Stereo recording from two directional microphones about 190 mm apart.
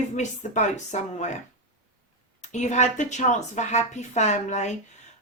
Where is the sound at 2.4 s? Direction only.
40° left (ahead or behind).